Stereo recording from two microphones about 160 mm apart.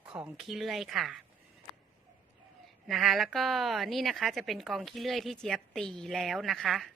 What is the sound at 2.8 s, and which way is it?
A woman's voice, centre (ahead or behind).